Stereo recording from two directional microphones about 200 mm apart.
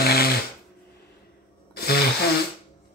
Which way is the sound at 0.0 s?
50° left (ahead or behind).